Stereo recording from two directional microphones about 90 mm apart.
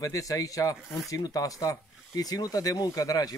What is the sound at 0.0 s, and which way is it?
Speech, 40° left (ahead or behind).